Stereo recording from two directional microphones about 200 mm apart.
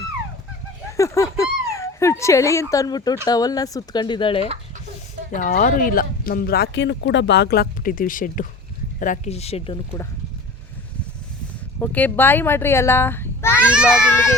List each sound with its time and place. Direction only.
0.9 s speech: 15° left (ahead or behind)
5.3 s speech: 40° left (ahead or behind)
11.8 s speech: 10° left (ahead or behind)
13.6 s a child's voice: 5° right (ahead or behind)
13.9 s speech: 10° left (ahead or behind)